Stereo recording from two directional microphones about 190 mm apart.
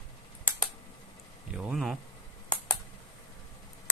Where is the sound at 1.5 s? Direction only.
5° right (ahead or behind).